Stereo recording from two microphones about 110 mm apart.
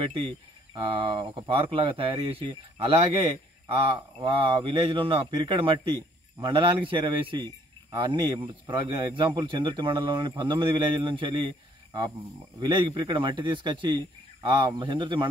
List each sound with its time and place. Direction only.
0.0 s a man's voice: 55° right (ahead or behind)